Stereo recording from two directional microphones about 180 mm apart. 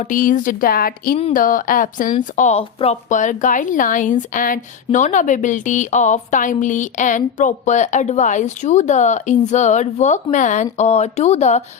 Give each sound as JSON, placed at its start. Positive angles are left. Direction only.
{"t": 0.0, "sound": "a woman's voice", "side_deg": 50}